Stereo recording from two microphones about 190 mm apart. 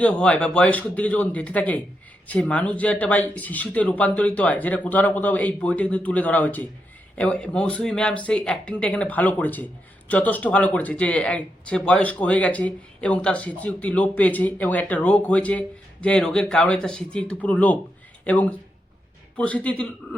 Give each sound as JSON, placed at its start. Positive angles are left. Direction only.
{"t": 0.0, "sound": "speech", "side_deg": 5}